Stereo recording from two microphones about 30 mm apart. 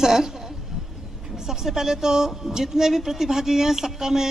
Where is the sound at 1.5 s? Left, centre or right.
Centre.